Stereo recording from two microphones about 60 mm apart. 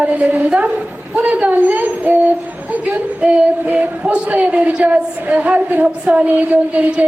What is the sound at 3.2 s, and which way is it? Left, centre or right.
A woman's voice, centre.